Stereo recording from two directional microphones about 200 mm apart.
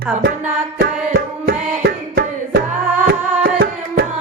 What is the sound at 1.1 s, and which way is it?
Tabla, 45° right (ahead or behind).